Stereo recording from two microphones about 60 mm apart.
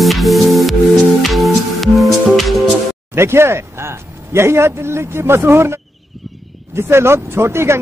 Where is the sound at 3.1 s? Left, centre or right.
Right.